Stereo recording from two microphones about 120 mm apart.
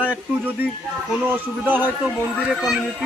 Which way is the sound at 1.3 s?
15° right (ahead or behind).